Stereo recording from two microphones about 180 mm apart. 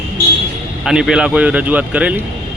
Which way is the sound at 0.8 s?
5° right (ahead or behind).